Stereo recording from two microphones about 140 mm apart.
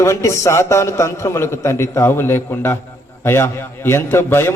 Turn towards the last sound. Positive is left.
turn(degrees=15)  # may be behind; listen again after turning